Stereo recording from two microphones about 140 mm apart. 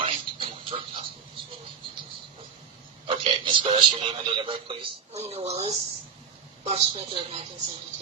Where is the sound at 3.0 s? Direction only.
40° right (ahead or behind).